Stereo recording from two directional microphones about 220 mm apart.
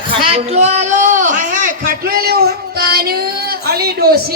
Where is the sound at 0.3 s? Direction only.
30° right (ahead or behind).